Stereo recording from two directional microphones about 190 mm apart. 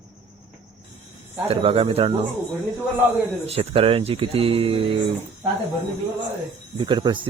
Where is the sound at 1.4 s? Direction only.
30° right (ahead or behind).